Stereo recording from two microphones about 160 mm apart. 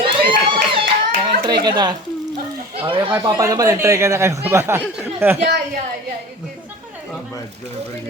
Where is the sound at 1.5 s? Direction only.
30° right (ahead or behind).